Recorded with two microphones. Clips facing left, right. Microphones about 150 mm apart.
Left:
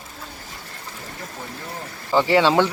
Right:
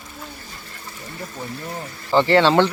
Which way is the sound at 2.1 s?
5° left (ahead or behind).